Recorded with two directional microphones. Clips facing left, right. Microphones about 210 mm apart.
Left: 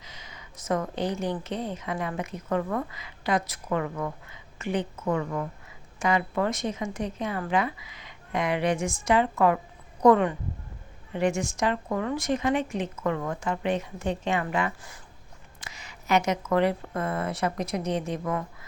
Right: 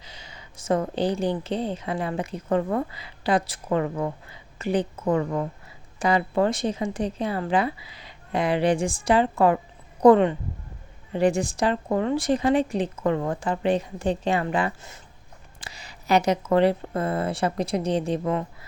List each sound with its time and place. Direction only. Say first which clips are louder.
0.0 s a woman's voice: right 2 dB; 30° right (ahead or behind)